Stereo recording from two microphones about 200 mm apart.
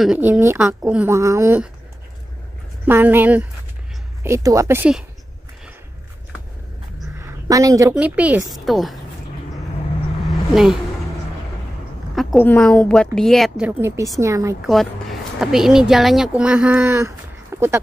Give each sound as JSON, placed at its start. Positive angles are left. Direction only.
{"t": 0.0, "sound": "a woman's voice", "side_deg": -5}
{"t": 2.8, "sound": "a woman's voice", "side_deg": -10}
{"t": 7.2, "sound": "a sound", "side_deg": -15}
{"t": 7.9, "sound": "speech", "side_deg": -5}
{"t": 10.5, "sound": "speech", "side_deg": -5}
{"t": 12.2, "sound": "a woman's voice", "side_deg": 0}
{"t": 14.6, "sound": "speech", "side_deg": 0}
{"t": 17.5, "sound": "a sound", "side_deg": -15}